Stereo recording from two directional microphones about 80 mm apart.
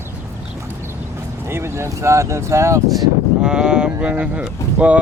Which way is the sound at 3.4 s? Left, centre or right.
Centre.